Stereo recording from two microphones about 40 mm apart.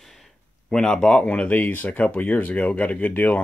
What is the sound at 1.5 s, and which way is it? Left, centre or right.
Speech, left.